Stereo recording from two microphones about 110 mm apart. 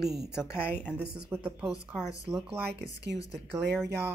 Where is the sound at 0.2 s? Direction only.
5° right (ahead or behind).